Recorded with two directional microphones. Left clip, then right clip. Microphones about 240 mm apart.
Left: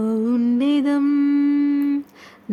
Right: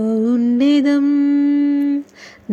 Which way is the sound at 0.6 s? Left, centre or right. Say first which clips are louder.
Right 7 dB; centre.